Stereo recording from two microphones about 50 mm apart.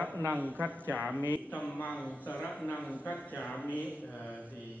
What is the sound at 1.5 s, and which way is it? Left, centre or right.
A man's voice, left.